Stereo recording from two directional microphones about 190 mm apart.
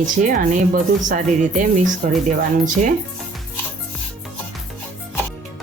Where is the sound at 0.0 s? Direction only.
40° right (ahead or behind).